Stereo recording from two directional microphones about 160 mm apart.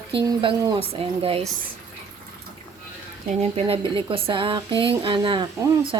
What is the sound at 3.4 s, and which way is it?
Speech, 35° right (ahead or behind).